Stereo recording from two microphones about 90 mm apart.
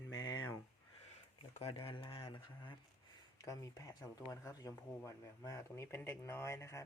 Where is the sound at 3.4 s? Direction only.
40° left (ahead or behind).